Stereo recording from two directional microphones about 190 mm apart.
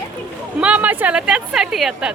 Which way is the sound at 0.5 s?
5° right (ahead or behind).